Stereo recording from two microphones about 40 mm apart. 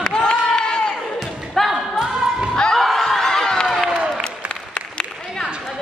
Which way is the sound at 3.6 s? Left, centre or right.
Centre.